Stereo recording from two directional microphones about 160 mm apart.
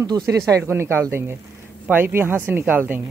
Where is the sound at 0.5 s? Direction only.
15° right (ahead or behind).